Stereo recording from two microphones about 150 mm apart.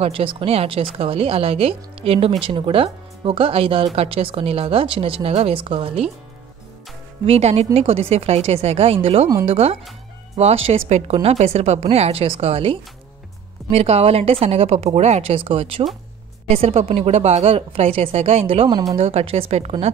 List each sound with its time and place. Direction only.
0.0 s speech: 35° right (ahead or behind)
7.2 s a woman's voice: 45° right (ahead or behind)